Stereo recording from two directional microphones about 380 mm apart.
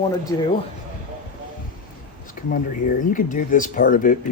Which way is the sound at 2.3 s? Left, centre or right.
Left.